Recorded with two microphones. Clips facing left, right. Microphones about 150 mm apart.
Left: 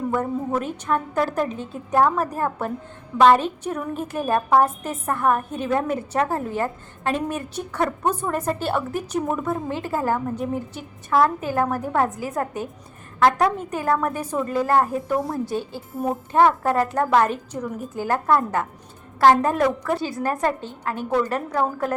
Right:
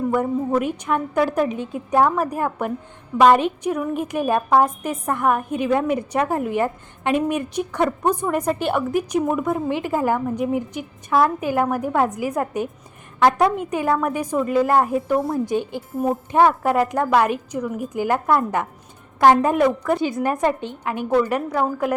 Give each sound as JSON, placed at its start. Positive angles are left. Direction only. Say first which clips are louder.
{"t": 0.6, "sound": "a woman's voice", "louder": "right 2 dB", "side_deg": -10}